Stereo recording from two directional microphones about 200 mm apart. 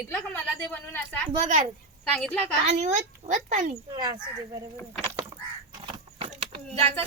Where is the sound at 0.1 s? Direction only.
5° left (ahead or behind).